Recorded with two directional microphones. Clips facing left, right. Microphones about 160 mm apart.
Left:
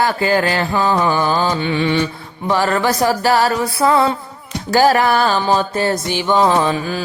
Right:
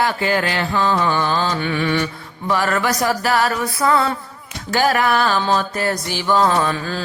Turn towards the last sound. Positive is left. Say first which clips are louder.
# left 3 dB
turn(degrees=15)  # may be behind; listen again after turning